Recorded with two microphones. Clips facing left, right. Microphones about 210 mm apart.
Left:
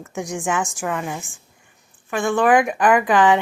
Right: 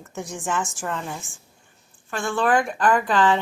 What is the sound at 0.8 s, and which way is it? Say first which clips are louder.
Speech: left 4 dB; 75° left (ahead or behind).